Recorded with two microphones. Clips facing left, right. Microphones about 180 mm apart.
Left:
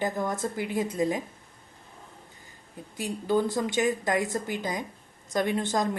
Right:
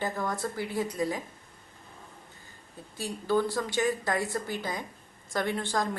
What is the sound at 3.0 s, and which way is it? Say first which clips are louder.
A woman's voice: left 2 dB; 20° left (ahead or behind).